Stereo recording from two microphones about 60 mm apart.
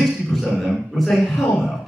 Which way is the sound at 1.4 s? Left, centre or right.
Centre.